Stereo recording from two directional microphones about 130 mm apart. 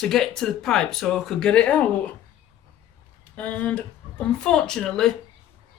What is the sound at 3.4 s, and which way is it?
Speech, 10° left (ahead or behind).